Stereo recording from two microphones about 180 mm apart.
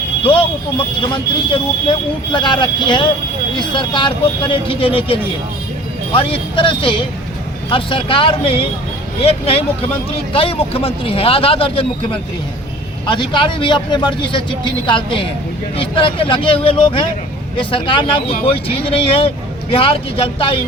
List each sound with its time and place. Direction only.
1.1 s speech: 25° left (ahead or behind)
13.1 s speech: 25° left (ahead or behind)